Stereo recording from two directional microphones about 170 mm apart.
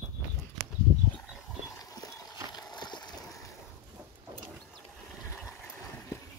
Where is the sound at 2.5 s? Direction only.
25° left (ahead or behind).